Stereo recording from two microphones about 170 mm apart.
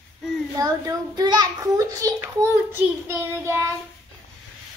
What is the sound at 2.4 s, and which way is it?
Child singing, 15° right (ahead or behind).